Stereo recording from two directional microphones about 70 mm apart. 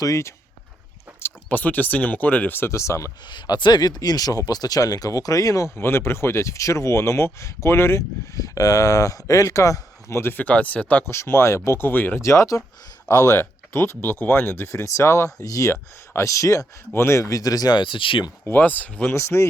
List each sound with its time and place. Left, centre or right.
0.0 s speech: left
1.5 s speech: left
2.6 s speech: left
3.2 s speech: left
8.4 s speech: left
10.2 s speech: left
11.0 s speech: left
12.2 s speech: left
13.4 s speech: left
16.9 s speech: left
18.4 s speech: left
19.1 s speech: left